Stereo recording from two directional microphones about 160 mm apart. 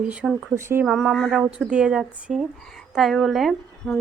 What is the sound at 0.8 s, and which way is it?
Speech, centre (ahead or behind).